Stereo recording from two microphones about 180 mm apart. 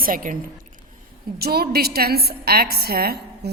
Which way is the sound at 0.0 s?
50° right (ahead or behind).